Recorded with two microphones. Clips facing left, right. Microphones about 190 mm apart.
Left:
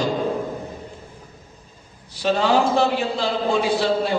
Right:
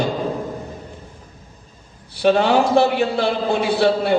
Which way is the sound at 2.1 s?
60° right (ahead or behind).